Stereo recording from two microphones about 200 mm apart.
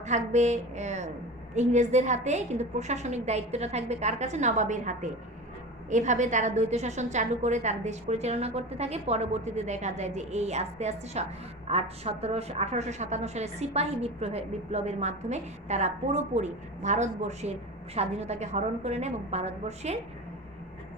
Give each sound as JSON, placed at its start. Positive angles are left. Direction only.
{"t": 0.0, "sound": "a woman's voice", "side_deg": -35}